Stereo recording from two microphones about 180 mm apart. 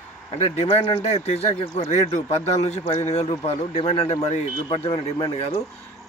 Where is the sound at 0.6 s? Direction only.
30° left (ahead or behind).